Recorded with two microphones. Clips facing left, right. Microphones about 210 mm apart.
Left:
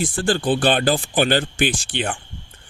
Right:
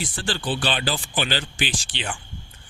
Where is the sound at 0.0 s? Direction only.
50° left (ahead or behind).